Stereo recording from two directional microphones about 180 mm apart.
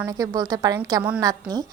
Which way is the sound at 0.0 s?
20° right (ahead or behind).